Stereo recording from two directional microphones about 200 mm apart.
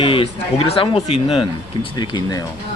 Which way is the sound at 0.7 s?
30° left (ahead or behind).